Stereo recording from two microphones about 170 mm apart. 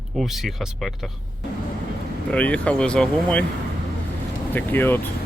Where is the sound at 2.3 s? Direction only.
10° left (ahead or behind).